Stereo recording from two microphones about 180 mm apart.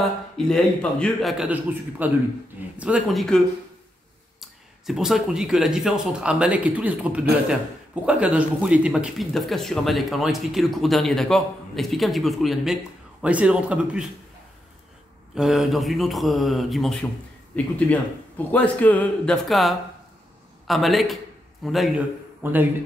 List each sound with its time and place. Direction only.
0.5 s speech: 5° left (ahead or behind)
1.4 s speech: 10° right (ahead or behind)
15.3 s speech: centre (ahead or behind)